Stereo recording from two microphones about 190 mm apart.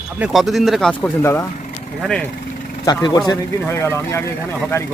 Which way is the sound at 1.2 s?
15° left (ahead or behind).